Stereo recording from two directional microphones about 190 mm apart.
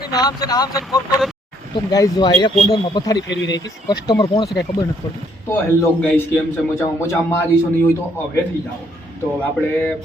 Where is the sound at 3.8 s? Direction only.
20° left (ahead or behind).